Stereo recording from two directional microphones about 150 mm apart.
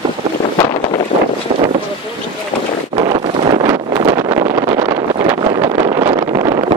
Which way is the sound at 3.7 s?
20° right (ahead or behind).